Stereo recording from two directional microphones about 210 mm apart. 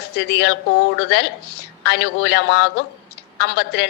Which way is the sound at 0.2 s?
55° left (ahead or behind).